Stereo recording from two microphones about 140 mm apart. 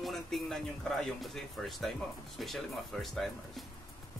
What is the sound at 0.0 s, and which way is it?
Speech, centre (ahead or behind).